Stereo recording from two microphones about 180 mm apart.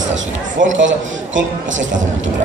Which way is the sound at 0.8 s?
90° right.